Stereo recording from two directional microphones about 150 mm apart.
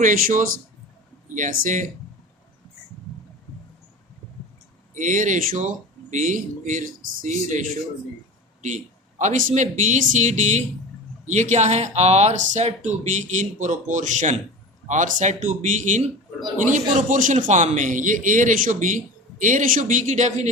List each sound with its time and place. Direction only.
0.0 s a man's voice: 60° right (ahead or behind)
4.9 s a man's voice: 60° right (ahead or behind)
8.6 s a man's voice: 55° right (ahead or behind)